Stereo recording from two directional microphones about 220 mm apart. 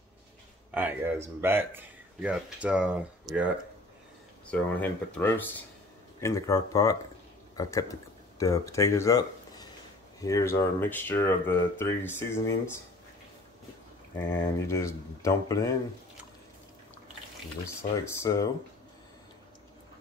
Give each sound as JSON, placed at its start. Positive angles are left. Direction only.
{"t": 0.7, "sound": "speech", "side_deg": -10}
{"t": 4.5, "sound": "speech", "side_deg": 5}
{"t": 14.1, "sound": "speech", "side_deg": 10}
{"t": 18.2, "sound": "speech", "side_deg": 15}